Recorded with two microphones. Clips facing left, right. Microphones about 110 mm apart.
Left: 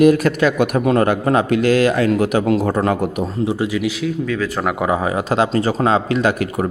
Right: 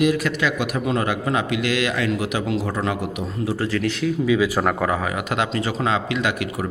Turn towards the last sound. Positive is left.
turn(degrees=40)  # may be behind; listen again after turning